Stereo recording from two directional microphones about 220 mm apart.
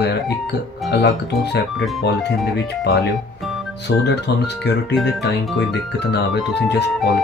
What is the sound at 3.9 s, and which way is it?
Speech, 50° left (ahead or behind).